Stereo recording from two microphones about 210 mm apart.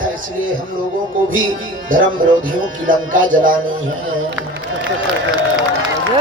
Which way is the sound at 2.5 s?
40° right (ahead or behind).